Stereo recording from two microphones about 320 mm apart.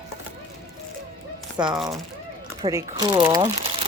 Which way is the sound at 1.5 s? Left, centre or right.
Centre.